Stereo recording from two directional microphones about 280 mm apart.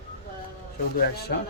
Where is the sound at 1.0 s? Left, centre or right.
Left.